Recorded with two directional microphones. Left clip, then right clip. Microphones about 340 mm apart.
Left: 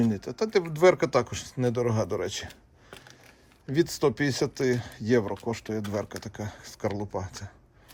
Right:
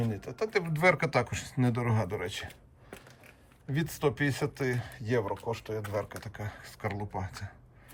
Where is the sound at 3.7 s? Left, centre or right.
Centre.